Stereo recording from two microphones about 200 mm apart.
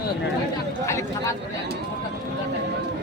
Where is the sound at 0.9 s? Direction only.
15° left (ahead or behind).